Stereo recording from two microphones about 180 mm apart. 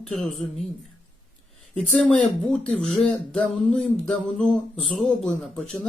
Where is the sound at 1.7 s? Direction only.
5° left (ahead or behind).